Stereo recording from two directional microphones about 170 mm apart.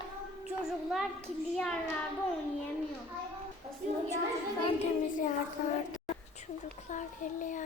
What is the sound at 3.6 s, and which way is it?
Child singing, 35° right (ahead or behind).